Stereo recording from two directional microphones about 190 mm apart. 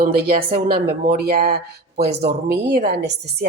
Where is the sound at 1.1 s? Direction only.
55° right (ahead or behind).